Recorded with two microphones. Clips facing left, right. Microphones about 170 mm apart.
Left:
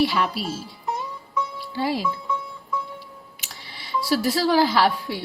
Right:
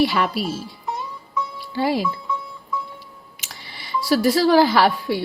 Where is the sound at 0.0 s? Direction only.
70° right (ahead or behind).